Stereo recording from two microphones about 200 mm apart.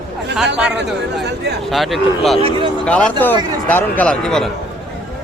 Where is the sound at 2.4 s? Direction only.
30° right (ahead or behind).